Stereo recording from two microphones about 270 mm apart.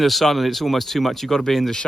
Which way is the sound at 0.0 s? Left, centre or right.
Centre.